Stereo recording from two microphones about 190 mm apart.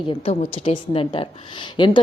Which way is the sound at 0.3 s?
30° left (ahead or behind).